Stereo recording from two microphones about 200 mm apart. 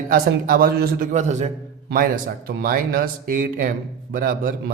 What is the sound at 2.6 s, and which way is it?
Speech, 45° right (ahead or behind).